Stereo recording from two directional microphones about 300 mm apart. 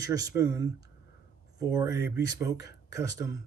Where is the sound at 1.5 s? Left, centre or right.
Centre.